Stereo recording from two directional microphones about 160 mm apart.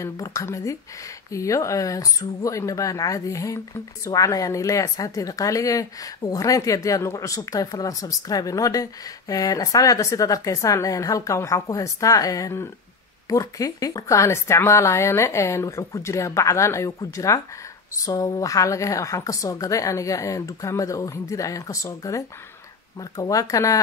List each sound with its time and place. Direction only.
0.0 s speech: 20° left (ahead or behind)